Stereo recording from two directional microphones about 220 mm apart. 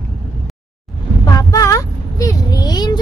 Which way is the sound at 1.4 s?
15° left (ahead or behind).